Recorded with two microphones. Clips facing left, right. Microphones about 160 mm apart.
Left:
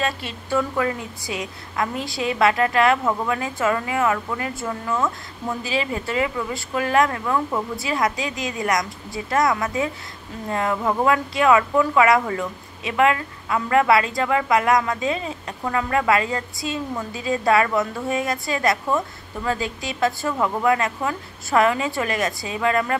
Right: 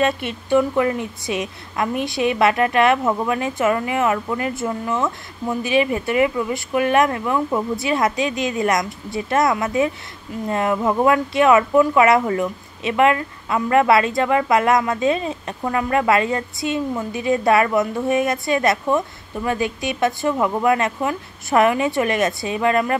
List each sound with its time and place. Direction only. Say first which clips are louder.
0.0 s speech: right 6 dB; 20° right (ahead or behind)